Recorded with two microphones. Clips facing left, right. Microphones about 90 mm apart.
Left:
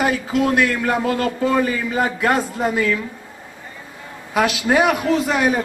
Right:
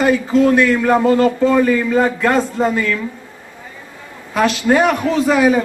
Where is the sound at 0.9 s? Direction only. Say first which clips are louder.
Right 7 dB; 25° right (ahead or behind).